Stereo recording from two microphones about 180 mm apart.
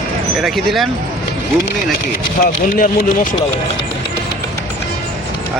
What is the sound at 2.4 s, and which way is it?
Speech, 50° left (ahead or behind).